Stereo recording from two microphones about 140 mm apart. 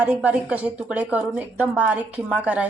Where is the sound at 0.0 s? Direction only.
10° right (ahead or behind).